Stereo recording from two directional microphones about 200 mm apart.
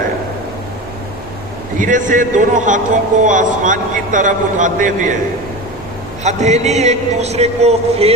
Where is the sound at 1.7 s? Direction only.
40° right (ahead or behind).